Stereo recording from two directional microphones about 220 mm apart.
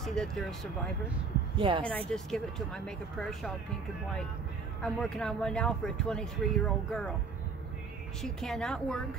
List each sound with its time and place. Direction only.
0.0 s speech: centre (ahead or behind)
1.6 s speech: 20° right (ahead or behind)
1.9 s speech: 5° left (ahead or behind)
4.8 s speech: 5° left (ahead or behind)
8.2 s speech: centre (ahead or behind)